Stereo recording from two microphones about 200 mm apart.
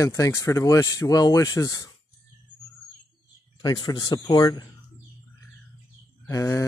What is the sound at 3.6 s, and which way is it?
Speech, 20° left (ahead or behind).